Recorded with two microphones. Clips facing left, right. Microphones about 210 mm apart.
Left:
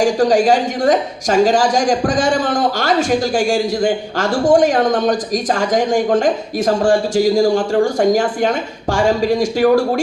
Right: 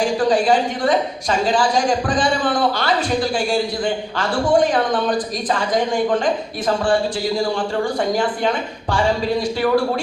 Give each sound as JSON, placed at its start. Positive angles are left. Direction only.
{"t": 0.0, "sound": "a woman's voice", "side_deg": 45}